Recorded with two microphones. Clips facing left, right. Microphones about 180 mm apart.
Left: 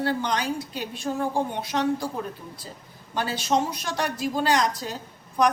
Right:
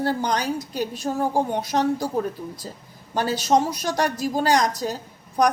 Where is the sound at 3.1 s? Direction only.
40° right (ahead or behind).